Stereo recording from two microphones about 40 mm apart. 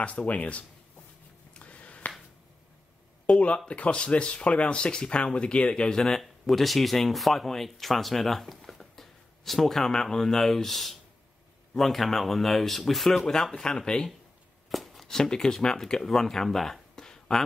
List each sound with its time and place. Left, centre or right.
0.3 s speech: left
1.5 s a sound: left
3.5 s speech: left; by 13.3 s centre
13.3 s speech: centre
14.7 s chopping: centre
15.0 s speech: centre
16.9 s a sound: centre